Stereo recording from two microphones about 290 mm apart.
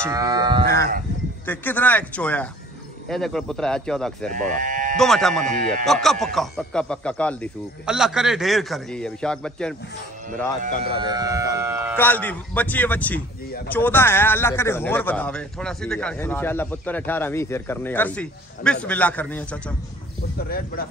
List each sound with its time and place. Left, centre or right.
0.0 s livestock: centre
1.4 s a man's voice: centre
4.6 s sheep: right
4.9 s a man's voice: centre
10.8 s speech: centre
12.0 s a man's voice: centre
20.4 s speech: left